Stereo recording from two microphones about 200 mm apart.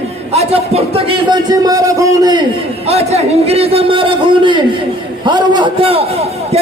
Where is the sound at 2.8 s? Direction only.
30° right (ahead or behind).